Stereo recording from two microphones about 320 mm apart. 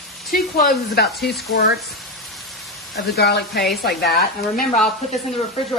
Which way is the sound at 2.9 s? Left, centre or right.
Left.